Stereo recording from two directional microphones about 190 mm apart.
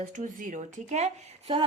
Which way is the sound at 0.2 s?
40° right (ahead or behind).